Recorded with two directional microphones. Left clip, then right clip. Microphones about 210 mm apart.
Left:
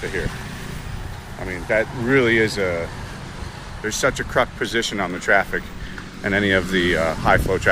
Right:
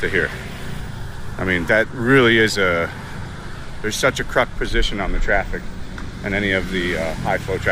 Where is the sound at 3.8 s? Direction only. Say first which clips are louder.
Right 2 dB; 10° right (ahead or behind).